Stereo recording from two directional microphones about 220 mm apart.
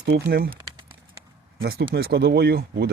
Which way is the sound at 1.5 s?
45° right (ahead or behind).